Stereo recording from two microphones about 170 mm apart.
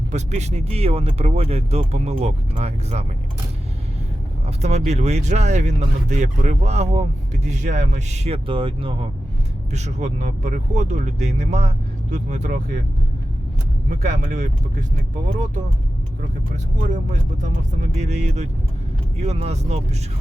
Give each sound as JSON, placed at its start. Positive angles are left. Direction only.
{"t": 0.1, "sound": "speech", "side_deg": -40}
{"t": 4.4, "sound": "speech", "side_deg": -40}
{"t": 9.7, "sound": "speech", "side_deg": -40}
{"t": 13.9, "sound": "speech", "side_deg": -50}
{"t": 16.5, "sound": "speech", "side_deg": -45}